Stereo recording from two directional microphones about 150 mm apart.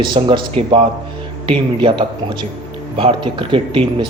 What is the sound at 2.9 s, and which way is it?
A man's voice, 35° right (ahead or behind).